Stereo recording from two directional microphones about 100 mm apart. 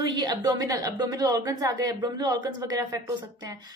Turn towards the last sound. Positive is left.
turn(degrees=-35)  # may be behind; listen again after turning